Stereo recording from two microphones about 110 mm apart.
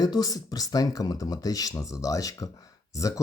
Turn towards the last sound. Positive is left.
turn(degrees=30)  # may be behind; listen again after turning